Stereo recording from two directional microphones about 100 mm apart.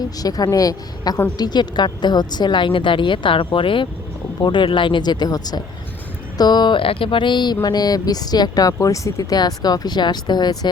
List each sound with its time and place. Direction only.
0.2 s a woman's voice: 40° left (ahead or behind)